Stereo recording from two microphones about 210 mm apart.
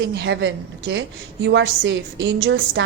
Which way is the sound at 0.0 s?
55° right (ahead or behind).